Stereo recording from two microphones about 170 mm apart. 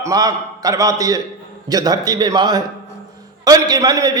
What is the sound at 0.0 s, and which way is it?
A man's voice, 20° right (ahead or behind).